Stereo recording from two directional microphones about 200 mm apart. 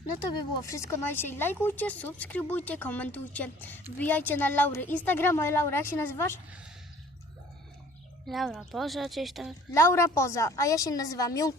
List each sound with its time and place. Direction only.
0.6 s speech: 15° left (ahead or behind)
8.3 s a woman's voice: centre (ahead or behind)
9.7 s speech: 15° left (ahead or behind)